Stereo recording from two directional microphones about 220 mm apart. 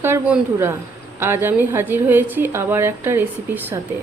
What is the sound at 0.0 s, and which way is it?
Speech, 10° right (ahead or behind).